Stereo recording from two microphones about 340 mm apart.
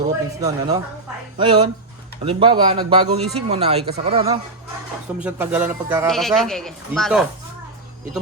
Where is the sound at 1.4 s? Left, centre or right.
Centre.